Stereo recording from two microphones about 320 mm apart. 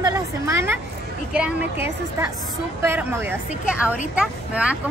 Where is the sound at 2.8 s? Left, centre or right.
Centre.